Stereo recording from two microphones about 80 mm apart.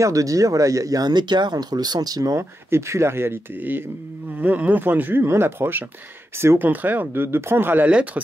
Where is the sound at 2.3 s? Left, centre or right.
Right.